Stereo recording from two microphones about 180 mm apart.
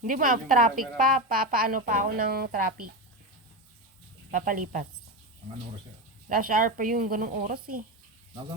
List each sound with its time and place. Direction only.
0.0 s a woman's voice: 50° right (ahead or behind)
4.3 s a woman's voice: 50° right (ahead or behind)
6.2 s a woman's voice: 50° right (ahead or behind)